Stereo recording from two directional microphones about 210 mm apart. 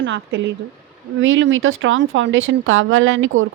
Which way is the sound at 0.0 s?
60° right (ahead or behind).